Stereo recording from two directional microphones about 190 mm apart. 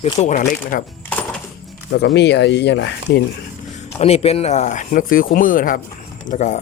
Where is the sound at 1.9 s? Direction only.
60° left (ahead or behind).